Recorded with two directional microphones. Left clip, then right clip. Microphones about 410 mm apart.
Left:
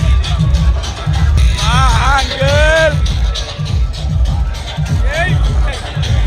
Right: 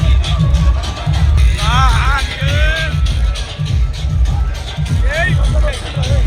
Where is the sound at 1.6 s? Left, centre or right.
Centre.